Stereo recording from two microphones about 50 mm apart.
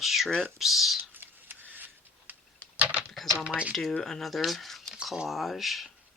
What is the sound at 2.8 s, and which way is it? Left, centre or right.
Typewriter, right.